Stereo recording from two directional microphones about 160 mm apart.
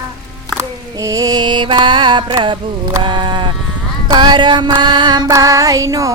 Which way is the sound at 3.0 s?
30° right (ahead or behind).